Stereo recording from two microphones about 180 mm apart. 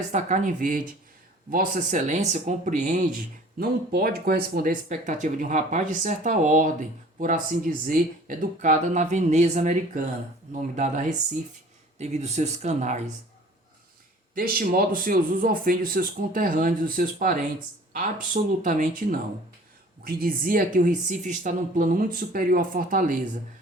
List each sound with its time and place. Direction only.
0.1 s speech: 40° right (ahead or behind)
14.3 s speech: 55° right (ahead or behind)
18.6 s speech: 45° right (ahead or behind)